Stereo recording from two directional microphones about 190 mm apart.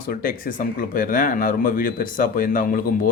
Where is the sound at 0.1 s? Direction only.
50° left (ahead or behind).